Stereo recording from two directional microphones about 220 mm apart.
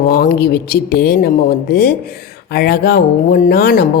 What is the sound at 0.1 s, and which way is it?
A woman's voice, 45° left (ahead or behind).